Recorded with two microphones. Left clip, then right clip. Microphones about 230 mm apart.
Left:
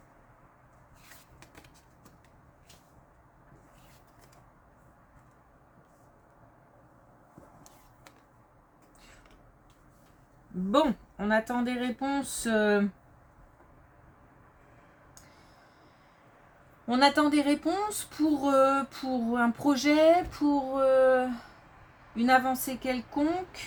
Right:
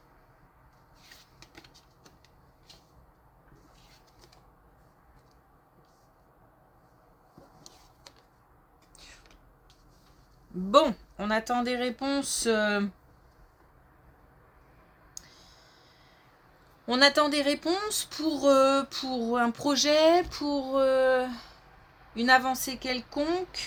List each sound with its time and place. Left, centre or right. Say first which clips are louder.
10.7 s speech: right 4 dB; right
16.8 s speech: right 2 dB; right